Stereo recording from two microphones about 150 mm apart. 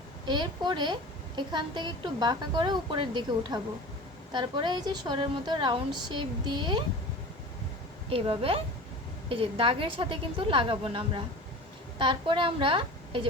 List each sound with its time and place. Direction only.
0.3 s a woman's voice: 30° right (ahead or behind)
8.1 s a woman's voice: 40° right (ahead or behind)